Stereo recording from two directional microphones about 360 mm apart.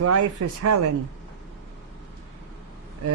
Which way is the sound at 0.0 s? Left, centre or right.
Right.